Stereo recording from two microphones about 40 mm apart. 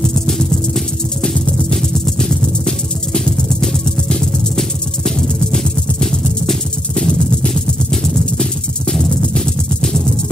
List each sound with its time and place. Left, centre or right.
0.3 s music: centre
7.1 s a sound: centre
9.2 s music: left